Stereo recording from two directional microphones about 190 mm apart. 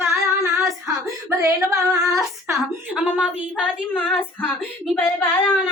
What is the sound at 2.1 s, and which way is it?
A woman's voice, 15° right (ahead or behind).